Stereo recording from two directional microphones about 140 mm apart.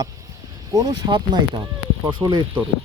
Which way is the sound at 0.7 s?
25° right (ahead or behind).